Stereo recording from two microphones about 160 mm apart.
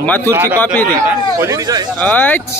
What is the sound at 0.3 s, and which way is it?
A man's voice, 15° right (ahead or behind).